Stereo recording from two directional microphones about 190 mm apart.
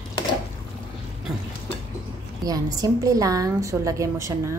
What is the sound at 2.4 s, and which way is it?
A woman's voice, 20° right (ahead or behind).